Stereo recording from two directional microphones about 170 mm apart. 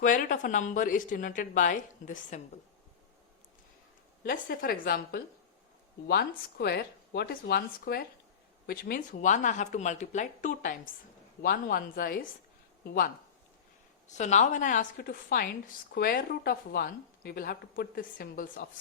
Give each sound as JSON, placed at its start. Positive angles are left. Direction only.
{"t": 0.0, "sound": "a woman's voice", "side_deg": 50}
{"t": 4.2, "sound": "a woman's voice", "side_deg": 60}
{"t": 11.4, "sound": "a woman's voice", "side_deg": 60}
{"t": 14.1, "sound": "a woman's voice", "side_deg": 45}